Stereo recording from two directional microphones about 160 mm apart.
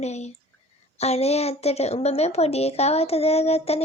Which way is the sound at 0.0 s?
45° left (ahead or behind).